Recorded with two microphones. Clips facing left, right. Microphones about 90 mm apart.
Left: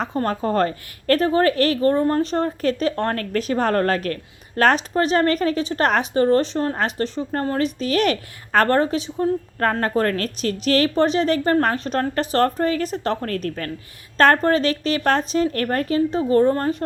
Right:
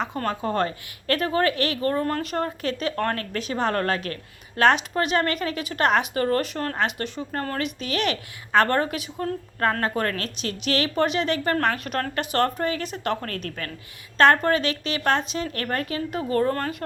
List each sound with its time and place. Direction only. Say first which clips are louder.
0.0 s a woman's voice: left 4 dB; 35° left (ahead or behind)
3.2 s a woman's voice: left 5 dB; 40° left (ahead or behind); by 16.7 s 25° left (ahead or behind)